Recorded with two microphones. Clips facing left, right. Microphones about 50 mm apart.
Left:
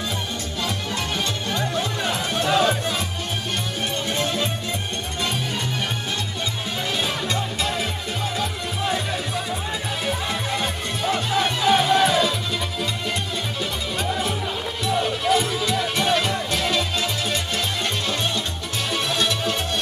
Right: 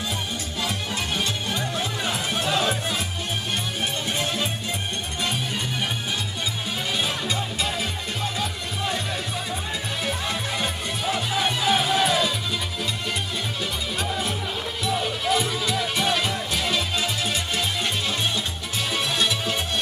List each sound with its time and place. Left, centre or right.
0.6 s music: centre
4.1 s music: centre
7.0 s music: centre
10.0 s music: centre
13.6 s music: centre